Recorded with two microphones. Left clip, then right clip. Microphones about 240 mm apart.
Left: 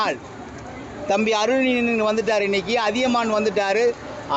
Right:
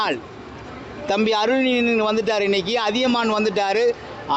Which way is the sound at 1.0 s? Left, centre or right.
Right.